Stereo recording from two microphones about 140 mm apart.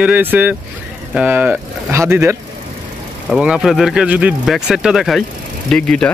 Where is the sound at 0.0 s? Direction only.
10° right (ahead or behind).